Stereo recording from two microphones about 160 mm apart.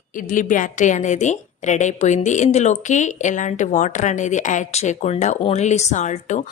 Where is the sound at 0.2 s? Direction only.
55° left (ahead or behind).